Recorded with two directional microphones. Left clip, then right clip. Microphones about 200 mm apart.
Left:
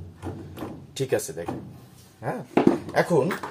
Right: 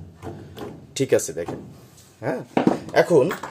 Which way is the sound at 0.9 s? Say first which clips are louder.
Right 6 dB; 50° right (ahead or behind).